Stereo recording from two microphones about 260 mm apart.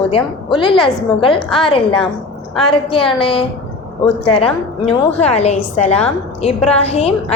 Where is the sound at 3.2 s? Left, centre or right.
Left.